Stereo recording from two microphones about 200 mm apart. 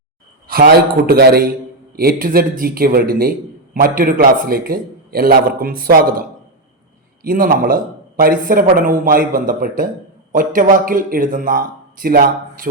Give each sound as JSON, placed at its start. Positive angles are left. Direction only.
{"t": 0.4, "sound": "a man's voice", "side_deg": -45}
{"t": 7.3, "sound": "a man's voice", "side_deg": -45}